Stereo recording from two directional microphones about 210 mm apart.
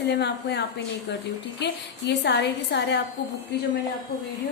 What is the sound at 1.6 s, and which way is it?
A woman's voice, 55° left (ahead or behind).